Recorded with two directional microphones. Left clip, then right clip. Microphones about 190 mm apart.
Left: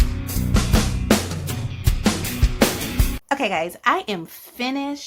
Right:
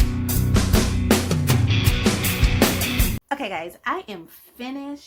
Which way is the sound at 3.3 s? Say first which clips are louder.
Left 10 dB; 20° left (ahead or behind).